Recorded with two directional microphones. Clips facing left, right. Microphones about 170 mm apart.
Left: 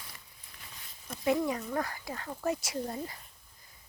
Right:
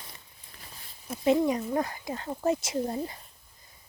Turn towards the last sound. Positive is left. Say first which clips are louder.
# right 5 dB
turn(degrees=-25)  # may be behind; listen again after turning